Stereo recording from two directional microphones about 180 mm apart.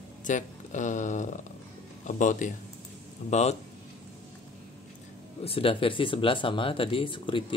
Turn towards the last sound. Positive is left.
turn(degrees=30)  # may be behind; listen again after turning